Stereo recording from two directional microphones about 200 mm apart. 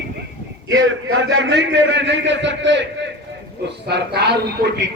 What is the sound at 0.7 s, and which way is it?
A man's voice, 70° right (ahead or behind).